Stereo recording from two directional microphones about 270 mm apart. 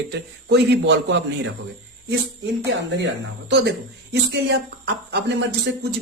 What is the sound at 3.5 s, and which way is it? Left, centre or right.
A man's voice, right.